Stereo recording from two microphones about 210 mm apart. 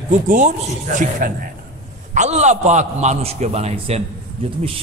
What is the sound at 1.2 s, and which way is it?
A man's voice, 40° right (ahead or behind).